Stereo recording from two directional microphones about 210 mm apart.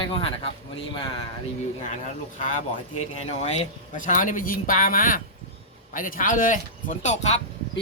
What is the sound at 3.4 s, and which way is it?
A man's voice, 35° left (ahead or behind).